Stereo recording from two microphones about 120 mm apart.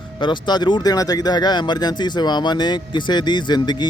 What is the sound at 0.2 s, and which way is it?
Speech, 40° left (ahead or behind).